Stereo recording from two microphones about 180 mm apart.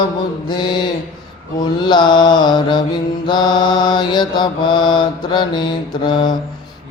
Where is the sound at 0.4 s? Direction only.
25° left (ahead or behind).